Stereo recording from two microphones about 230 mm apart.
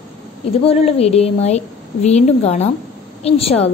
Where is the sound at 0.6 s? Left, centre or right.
Left.